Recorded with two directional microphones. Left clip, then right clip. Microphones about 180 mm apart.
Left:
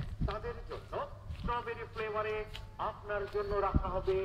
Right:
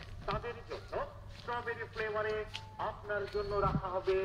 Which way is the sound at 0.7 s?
35° right (ahead or behind).